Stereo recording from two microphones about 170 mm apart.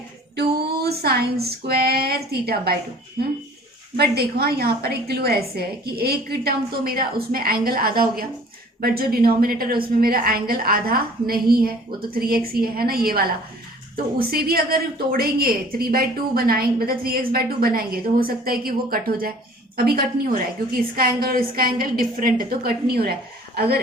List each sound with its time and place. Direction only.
0.3 s a sound: 70° right (ahead or behind)
3.9 s a woman's voice: 70° right (ahead or behind)
14.3 s a woman's voice: 60° right (ahead or behind)